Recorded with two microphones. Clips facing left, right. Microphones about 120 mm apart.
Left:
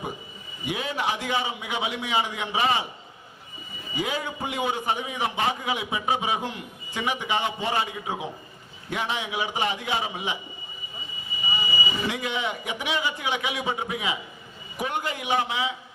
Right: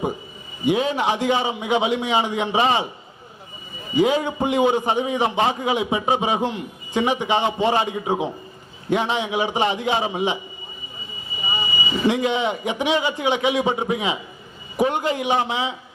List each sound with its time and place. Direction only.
0.6 s a man's voice: 25° right (ahead or behind)
3.9 s a man's voice: 25° right (ahead or behind)
12.0 s a man's voice: 25° right (ahead or behind)